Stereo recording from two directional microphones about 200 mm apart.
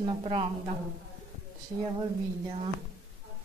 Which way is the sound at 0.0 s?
30° right (ahead or behind).